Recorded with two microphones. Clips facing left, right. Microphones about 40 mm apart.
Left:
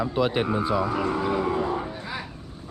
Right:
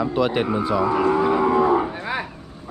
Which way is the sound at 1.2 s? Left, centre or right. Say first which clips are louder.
Right 6 dB; right.